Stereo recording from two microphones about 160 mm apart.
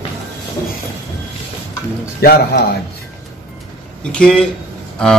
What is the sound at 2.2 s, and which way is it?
Speech, 75° left (ahead or behind).